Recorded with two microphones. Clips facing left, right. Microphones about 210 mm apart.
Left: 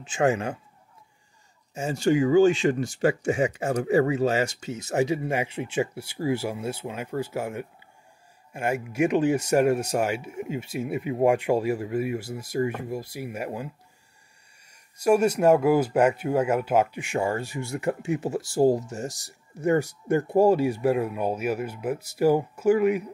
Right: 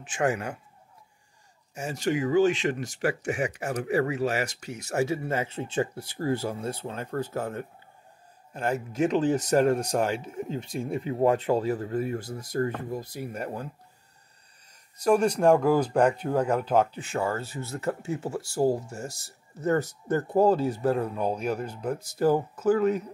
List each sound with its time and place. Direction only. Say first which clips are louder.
0.0 s speech: left 4 dB; 25° left (ahead or behind)
1.7 s speech: left 5 dB; 25° left (ahead or behind); by 13.7 s 10° left (ahead or behind)
14.7 s speech: left 2 dB; 10° left (ahead or behind)